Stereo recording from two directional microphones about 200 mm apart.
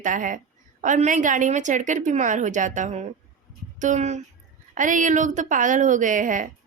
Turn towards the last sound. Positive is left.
turn(degrees=-40)  # may be behind; listen again after turning